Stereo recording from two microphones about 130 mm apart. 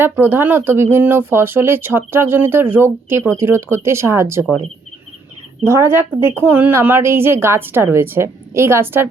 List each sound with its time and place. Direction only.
0.0 s speech: 15° right (ahead or behind)
5.6 s a woman's voice: 20° right (ahead or behind)